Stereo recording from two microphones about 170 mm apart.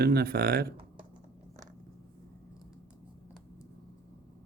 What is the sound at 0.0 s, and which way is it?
Speech, 65° right (ahead or behind).